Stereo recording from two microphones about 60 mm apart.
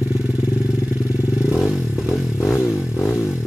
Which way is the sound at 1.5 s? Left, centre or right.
Centre.